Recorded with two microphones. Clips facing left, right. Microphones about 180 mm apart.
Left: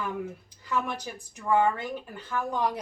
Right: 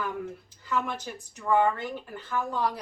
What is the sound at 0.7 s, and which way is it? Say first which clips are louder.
Speech: even; 15° left (ahead or behind).